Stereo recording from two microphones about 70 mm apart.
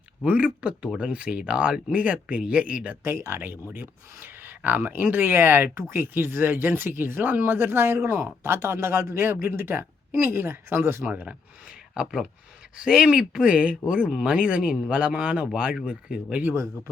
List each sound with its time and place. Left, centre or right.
0.3 s speech: centre
3.0 s speech: right
11.1 s speech: right
11.9 s speech: centre